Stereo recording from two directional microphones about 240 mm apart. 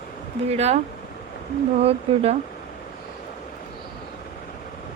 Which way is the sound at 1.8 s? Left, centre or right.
Right.